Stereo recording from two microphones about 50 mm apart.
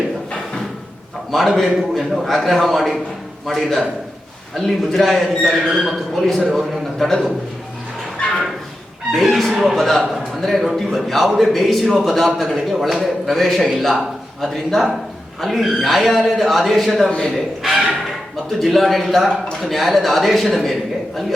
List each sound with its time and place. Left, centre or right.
1.3 s a man's voice: centre
9.1 s a man's voice: centre
17.1 s a man's voice: centre
17.3 s a sound: centre
18.6 s a man's voice: centre